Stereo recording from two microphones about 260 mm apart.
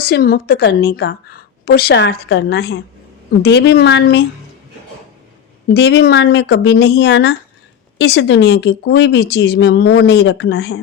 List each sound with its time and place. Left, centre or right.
0.0 s speech: left
5.7 s speech: left